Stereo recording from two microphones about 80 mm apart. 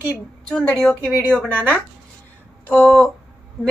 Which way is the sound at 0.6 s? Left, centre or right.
Centre.